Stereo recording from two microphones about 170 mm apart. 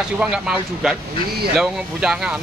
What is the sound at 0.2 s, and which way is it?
A man's voice, 5° right (ahead or behind).